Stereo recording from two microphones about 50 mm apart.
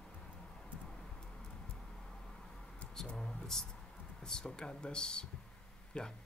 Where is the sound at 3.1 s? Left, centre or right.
Centre.